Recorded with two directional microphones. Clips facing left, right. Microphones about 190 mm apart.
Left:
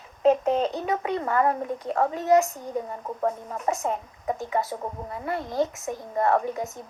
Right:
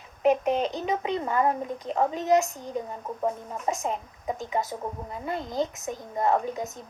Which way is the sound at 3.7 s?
15° right (ahead or behind).